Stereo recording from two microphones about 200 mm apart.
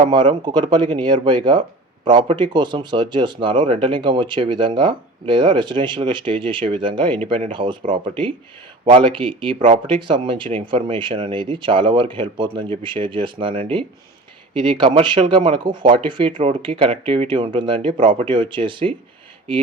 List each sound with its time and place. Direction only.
0.1 s speech: 25° right (ahead or behind)